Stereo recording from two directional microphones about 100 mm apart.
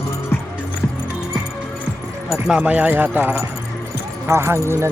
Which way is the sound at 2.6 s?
15° right (ahead or behind).